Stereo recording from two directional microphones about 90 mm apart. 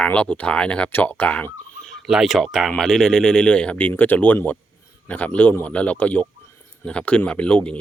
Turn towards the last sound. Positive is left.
turn(degrees=15)  # may be behind; listen again after turning